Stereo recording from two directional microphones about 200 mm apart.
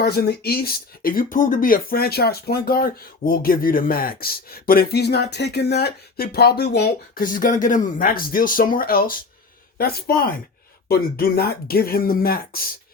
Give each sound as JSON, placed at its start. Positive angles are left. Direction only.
{"t": 0.0, "sound": "speech", "side_deg": 55}